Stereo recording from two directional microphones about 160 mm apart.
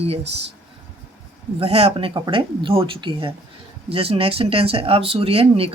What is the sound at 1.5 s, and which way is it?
Speech, 40° right (ahead or behind).